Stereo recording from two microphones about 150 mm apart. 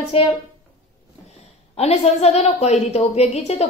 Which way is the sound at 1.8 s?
45° left (ahead or behind).